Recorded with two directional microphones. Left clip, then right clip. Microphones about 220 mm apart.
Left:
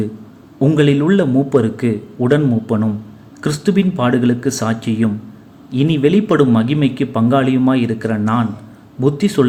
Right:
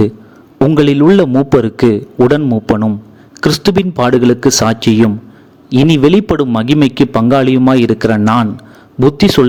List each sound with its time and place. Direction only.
0.7 s a man's voice: 45° right (ahead or behind)